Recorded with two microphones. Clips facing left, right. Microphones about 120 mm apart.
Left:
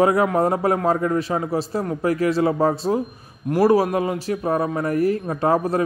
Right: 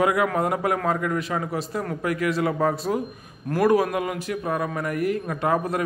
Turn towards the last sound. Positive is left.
turn(degrees=35)  # may be behind; listen again after turning